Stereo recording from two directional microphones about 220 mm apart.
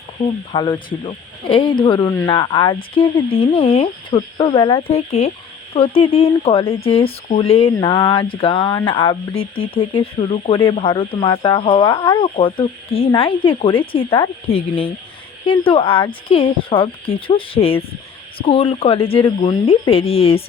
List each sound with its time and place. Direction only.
0.2 s speech: 30° left (ahead or behind)